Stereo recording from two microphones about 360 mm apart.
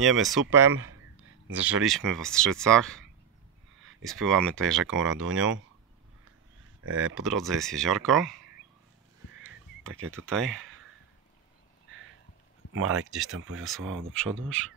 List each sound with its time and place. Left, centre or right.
0.0 s speech: centre
0.7 s a sound: right
1.6 s speech: centre
6.8 s speech: right
7.2 s speech: centre
10.2 s speech: centre
12.7 s speech: right
14.4 s speech: centre